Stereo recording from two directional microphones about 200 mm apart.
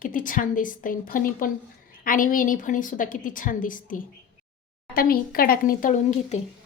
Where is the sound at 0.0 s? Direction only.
40° left (ahead or behind).